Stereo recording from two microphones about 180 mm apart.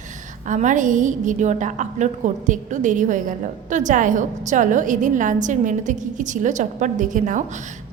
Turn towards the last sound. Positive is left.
turn(degrees=-45)  # may be behind; listen again after turning